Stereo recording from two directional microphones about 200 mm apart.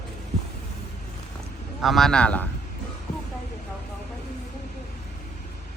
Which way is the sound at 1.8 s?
Centre (ahead or behind).